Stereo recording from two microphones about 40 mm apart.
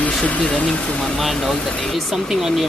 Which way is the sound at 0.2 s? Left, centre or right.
Left.